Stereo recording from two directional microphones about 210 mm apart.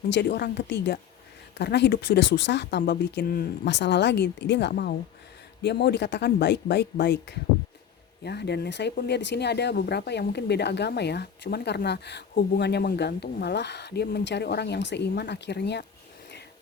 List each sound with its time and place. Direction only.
0.1 s speech: 50° left (ahead or behind)